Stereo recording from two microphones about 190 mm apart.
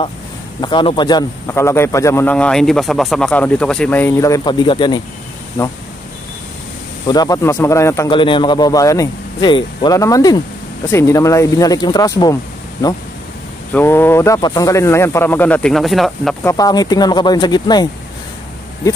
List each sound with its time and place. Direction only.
0.6 s a man's voice: 25° left (ahead or behind)
7.1 s a man's voice: 20° left (ahead or behind)
8.1 s a man's voice: 25° left (ahead or behind)
13.7 s a man's voice: 10° left (ahead or behind)
16.4 s speech: 20° left (ahead or behind)